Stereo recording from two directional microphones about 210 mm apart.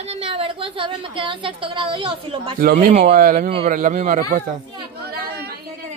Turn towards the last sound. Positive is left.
turn(degrees=-40)  # may be behind; listen again after turning